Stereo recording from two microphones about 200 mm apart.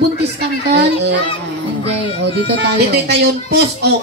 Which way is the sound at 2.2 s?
60° right (ahead or behind).